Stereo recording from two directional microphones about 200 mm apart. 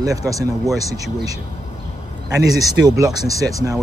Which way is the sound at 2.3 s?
20° right (ahead or behind).